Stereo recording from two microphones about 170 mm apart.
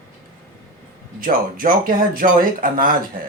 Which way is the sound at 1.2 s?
55° right (ahead or behind).